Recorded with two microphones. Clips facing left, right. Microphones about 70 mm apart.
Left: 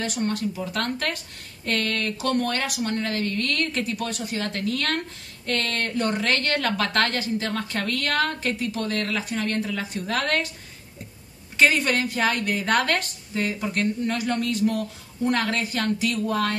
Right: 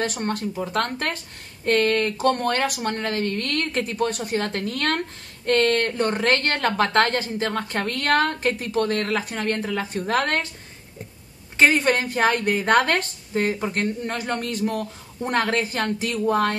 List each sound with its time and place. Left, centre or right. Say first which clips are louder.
0.0 s a woman's voice: right 1 dB; right
11.5 s a woman's voice: right 2 dB; right